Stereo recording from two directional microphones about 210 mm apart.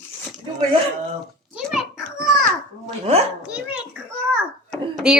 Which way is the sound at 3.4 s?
5° right (ahead or behind).